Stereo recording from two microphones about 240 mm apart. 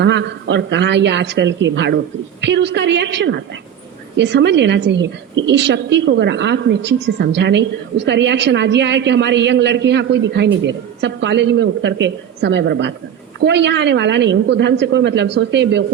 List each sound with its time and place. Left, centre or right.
0.0 s a woman's voice: right